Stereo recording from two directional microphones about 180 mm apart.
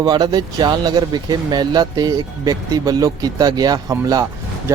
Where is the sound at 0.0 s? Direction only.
25° right (ahead or behind).